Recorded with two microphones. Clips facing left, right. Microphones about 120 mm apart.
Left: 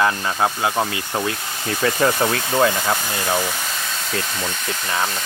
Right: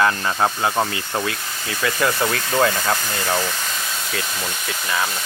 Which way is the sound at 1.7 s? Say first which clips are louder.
Left 2 dB; 25° left (ahead or behind).